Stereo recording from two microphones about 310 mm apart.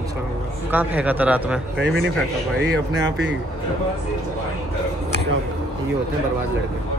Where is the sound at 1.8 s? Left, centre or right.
Right.